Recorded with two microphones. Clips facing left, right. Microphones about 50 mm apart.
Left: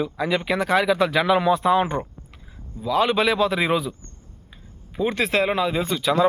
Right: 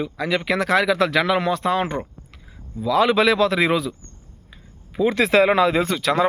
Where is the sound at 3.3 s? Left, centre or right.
Right.